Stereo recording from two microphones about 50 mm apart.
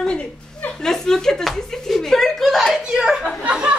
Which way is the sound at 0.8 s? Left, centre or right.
Centre.